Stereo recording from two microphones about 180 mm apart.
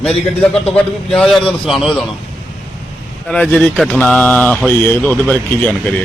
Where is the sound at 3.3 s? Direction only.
5° left (ahead or behind).